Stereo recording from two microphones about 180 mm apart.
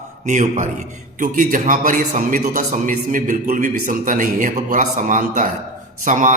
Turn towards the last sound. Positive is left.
turn(degrees=-45)  # may be behind; listen again after turning